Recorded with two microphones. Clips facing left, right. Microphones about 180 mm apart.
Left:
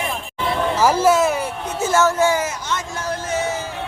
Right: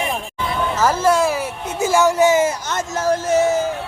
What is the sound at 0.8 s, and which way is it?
Speech, 10° left (ahead or behind).